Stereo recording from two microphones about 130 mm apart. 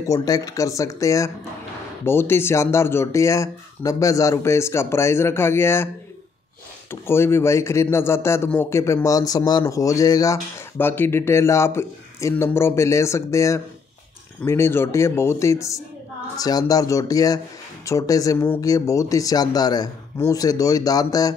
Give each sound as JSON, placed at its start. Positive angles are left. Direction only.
{"t": 0.0, "sound": "speech", "side_deg": 25}
{"t": 6.9, "sound": "speech", "side_deg": 20}